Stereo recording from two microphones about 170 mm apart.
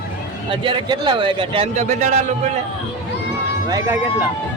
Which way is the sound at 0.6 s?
30° right (ahead or behind).